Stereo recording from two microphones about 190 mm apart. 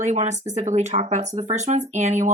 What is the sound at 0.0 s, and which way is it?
Speech, 35° right (ahead or behind).